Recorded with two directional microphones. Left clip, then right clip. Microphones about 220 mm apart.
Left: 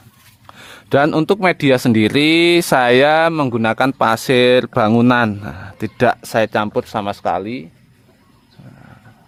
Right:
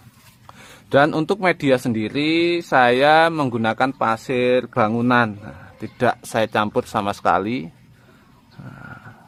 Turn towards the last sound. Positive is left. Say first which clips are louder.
# right 1 dB
turn(degrees=-5)  # may be behind; listen again after turning